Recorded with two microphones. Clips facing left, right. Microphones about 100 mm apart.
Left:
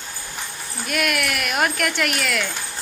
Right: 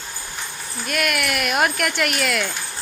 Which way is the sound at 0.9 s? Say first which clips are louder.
Even; centre (ahead or behind).